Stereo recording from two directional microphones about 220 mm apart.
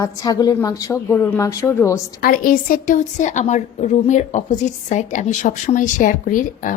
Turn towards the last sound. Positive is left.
turn(degrees=35)  # may be behind; listen again after turning